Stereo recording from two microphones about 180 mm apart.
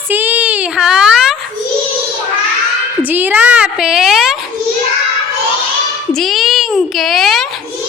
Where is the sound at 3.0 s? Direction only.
10° right (ahead or behind).